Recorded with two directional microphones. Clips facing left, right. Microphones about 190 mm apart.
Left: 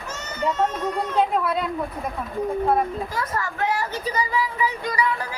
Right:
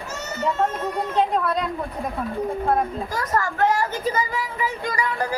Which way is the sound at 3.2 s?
45° right (ahead or behind).